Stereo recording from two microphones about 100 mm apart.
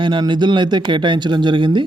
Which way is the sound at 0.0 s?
55° right (ahead or behind).